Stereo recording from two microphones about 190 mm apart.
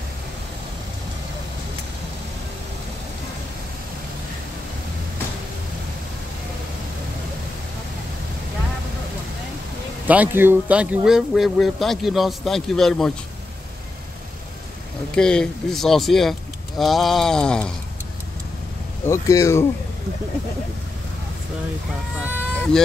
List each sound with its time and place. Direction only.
10.0 s speech: 10° right (ahead or behind)
15.1 s speech: 5° left (ahead or behind)
19.0 s speech: 15° left (ahead or behind)
22.6 s speech: 5° left (ahead or behind)